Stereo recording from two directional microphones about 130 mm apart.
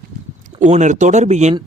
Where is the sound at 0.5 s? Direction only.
65° right (ahead or behind).